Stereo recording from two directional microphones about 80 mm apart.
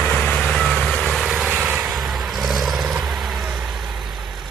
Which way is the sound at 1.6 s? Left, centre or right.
Right.